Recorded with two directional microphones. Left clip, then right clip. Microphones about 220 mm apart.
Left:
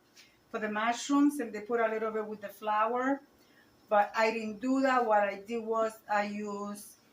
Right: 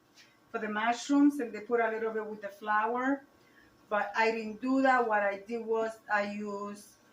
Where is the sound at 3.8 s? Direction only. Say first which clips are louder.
Left 2 dB; 25° left (ahead or behind).